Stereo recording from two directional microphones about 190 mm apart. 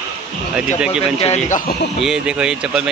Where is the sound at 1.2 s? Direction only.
35° left (ahead or behind).